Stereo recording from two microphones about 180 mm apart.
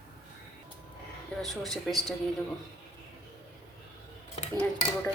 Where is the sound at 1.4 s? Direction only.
Centre (ahead or behind).